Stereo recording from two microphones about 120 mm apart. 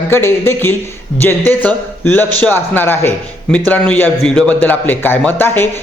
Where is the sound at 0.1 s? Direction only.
20° left (ahead or behind).